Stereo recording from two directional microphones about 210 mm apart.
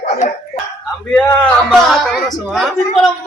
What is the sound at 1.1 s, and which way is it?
Speech, centre (ahead or behind).